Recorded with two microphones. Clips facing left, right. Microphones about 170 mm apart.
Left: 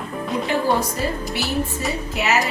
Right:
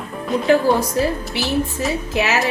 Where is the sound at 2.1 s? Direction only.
90° right.